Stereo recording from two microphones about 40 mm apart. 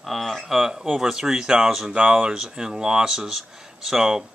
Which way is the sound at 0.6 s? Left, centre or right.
Centre.